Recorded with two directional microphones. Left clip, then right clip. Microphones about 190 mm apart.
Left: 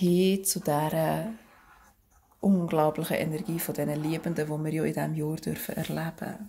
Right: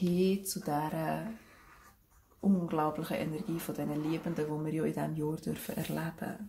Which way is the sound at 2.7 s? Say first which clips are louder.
Left 9 dB; 50° left (ahead or behind).